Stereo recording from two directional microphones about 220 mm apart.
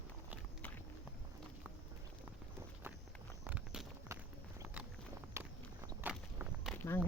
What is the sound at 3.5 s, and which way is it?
Clip-clop, 5° right (ahead or behind).